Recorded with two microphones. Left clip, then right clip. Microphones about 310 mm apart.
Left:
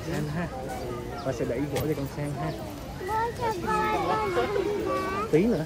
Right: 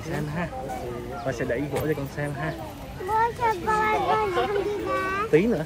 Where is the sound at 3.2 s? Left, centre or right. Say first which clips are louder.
Right 6 dB; right.